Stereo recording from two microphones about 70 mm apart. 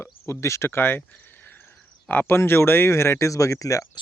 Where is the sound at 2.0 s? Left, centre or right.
Left.